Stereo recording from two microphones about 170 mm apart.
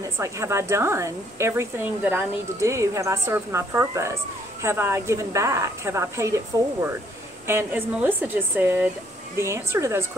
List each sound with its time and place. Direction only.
0.0 s a woman's voice: 15° right (ahead or behind)